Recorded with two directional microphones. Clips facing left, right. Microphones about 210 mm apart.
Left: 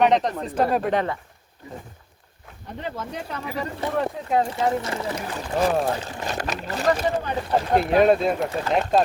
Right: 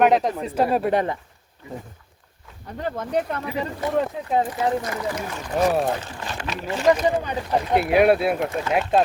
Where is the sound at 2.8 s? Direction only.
55° right (ahead or behind).